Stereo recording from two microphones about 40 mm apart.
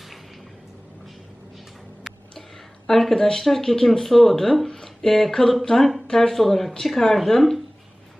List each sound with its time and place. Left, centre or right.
2.8 s speech: centre